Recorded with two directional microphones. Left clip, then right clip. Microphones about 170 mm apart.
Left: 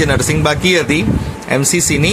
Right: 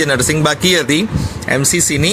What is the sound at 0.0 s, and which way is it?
Speech, 15° right (ahead or behind).